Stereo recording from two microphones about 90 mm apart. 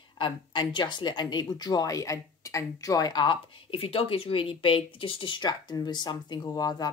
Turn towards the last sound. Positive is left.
turn(degrees=50)  # may be behind; listen again after turning